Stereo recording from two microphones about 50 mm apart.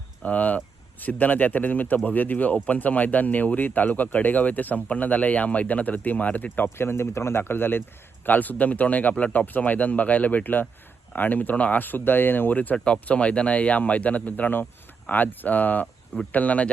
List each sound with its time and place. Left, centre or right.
0.3 s speech: left
6.7 s speech: left
12.7 s speech: left